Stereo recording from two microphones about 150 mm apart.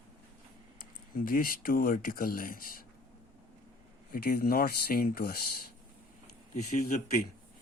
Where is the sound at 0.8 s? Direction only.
70° left (ahead or behind).